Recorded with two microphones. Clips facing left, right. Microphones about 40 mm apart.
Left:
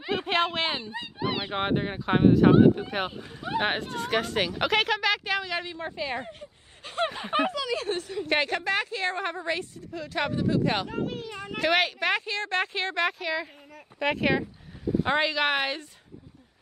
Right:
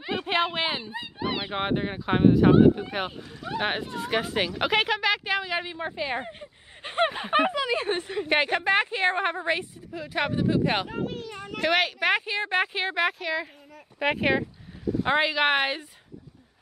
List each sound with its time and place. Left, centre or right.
0.3 s speech: centre
3.2 s speech: centre
3.6 s speech: centre; by 7.1 s right
7.1 s a woman's voice: centre
8.3 s a woman's voice: centre
11.0 s a sound: centre
11.6 s speech: centre
12.0 s speech: centre